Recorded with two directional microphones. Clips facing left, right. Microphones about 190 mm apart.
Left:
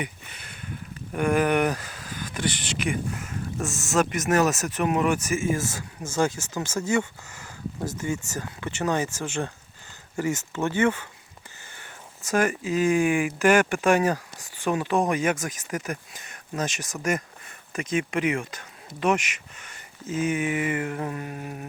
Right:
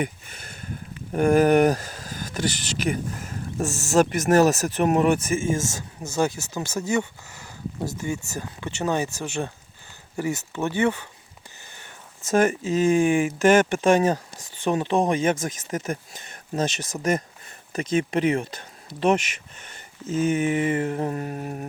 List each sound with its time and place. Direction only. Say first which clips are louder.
0.0 s a sound: right 6 dB; 45° right (ahead or behind)
1.1 s speech: right 5 dB; 40° right (ahead or behind)
6.1 s speech: right 1 dB; 15° right (ahead or behind); by 19.2 s 30° right (ahead or behind)
20.2 s speech: right 4 dB; 35° right (ahead or behind)